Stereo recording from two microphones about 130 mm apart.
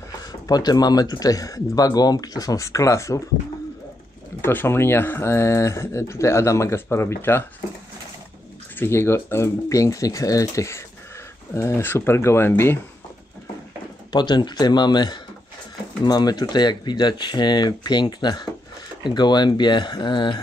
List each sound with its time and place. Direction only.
0.5 s speech: 30° left (ahead or behind)
4.4 s speech: 15° left (ahead or behind)
8.7 s speech: 20° left (ahead or behind)
14.1 s speech: 35° left (ahead or behind)